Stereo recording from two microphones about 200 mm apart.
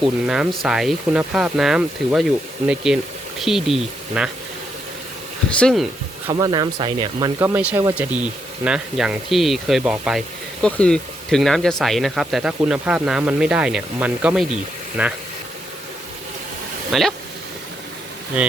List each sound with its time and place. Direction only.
0.0 s speech: centre (ahead or behind)
5.5 s speech: 5° left (ahead or behind)
6.2 s speech: 20° right (ahead or behind); by 15.1 s 5° right (ahead or behind)
16.9 s speech: centre (ahead or behind)